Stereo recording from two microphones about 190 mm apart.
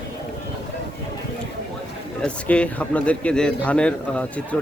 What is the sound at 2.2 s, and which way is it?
Speech, 5° left (ahead or behind).